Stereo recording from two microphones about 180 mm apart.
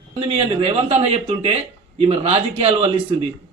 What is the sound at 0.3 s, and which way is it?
Speech, 35° right (ahead or behind).